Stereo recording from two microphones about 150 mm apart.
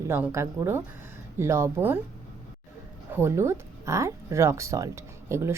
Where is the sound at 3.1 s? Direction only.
15° right (ahead or behind).